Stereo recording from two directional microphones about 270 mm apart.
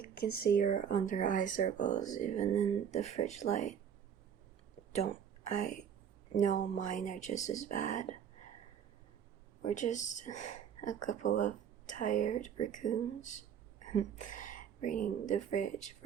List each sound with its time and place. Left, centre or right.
0.0 s a sound: left
0.3 s speech: left
6.3 s speech: left
9.6 s a woman's voice: left